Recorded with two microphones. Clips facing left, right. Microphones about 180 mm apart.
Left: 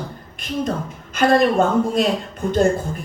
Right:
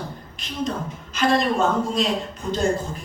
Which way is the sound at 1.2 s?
55° left (ahead or behind).